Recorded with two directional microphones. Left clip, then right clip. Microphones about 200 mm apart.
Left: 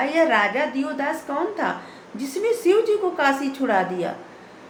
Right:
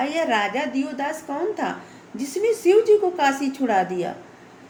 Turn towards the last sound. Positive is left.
turn(degrees=-30)  # may be behind; listen again after turning